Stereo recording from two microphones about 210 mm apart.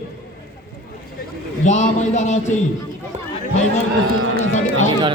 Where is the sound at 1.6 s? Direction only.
35° left (ahead or behind).